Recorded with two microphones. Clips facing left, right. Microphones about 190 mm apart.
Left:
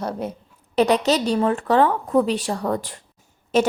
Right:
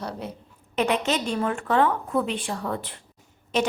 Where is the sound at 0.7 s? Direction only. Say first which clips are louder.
Left 6 dB; 35° left (ahead or behind).